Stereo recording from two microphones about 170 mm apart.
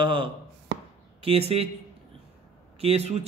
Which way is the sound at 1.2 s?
35° right (ahead or behind).